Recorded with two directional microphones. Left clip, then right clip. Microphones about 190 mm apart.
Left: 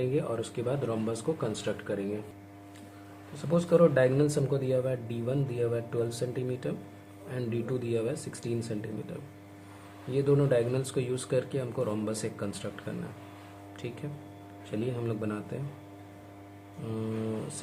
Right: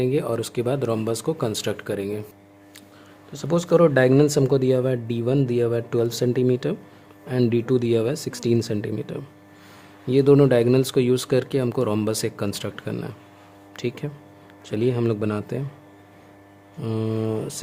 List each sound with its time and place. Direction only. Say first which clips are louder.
0.0 s speech: right 8 dB; 65° right (ahead or behind)
3.3 s speech: right 6 dB; 55° right (ahead or behind)
16.8 s speech: right 9 dB; 60° right (ahead or behind)